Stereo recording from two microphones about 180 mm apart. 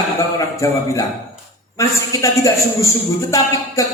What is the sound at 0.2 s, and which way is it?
A man's voice, 20° left (ahead or behind).